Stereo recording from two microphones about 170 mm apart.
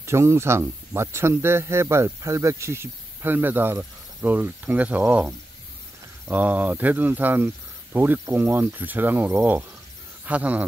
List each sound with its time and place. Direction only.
0.0 s speech: 15° right (ahead or behind)